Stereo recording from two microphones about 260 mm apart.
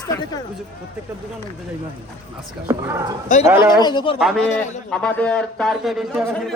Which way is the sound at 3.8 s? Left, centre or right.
Centre.